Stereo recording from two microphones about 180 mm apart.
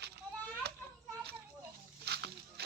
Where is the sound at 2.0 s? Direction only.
65° right (ahead or behind).